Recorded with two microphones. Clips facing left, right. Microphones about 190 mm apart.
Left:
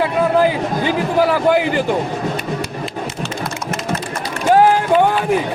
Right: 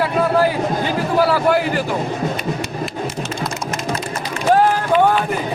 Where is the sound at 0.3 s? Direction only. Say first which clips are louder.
Left 1 dB; 15° left (ahead or behind).